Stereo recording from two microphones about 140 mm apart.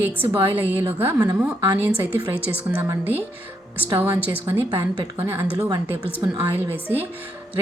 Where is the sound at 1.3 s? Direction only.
25° right (ahead or behind).